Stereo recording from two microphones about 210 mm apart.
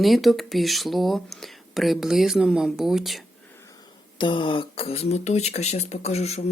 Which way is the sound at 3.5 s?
15° left (ahead or behind).